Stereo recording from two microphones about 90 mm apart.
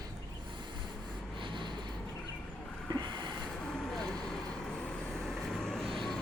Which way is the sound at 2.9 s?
55° right (ahead or behind).